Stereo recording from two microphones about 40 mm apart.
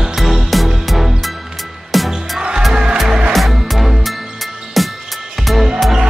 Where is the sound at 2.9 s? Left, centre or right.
Centre.